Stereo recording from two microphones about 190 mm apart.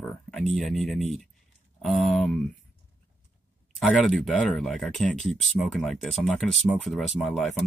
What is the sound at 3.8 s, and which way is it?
Speech, centre (ahead or behind).